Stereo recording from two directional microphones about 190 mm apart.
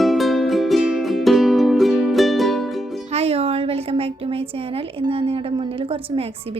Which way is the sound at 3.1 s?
30° right (ahead or behind).